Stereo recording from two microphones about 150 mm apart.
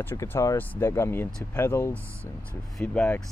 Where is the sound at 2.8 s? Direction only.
5° left (ahead or behind).